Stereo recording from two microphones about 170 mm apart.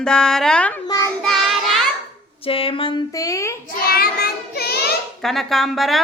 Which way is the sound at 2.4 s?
35° left (ahead or behind).